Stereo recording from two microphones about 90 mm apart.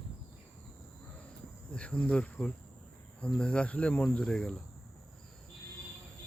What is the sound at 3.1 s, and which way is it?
Cricket, 10° left (ahead or behind).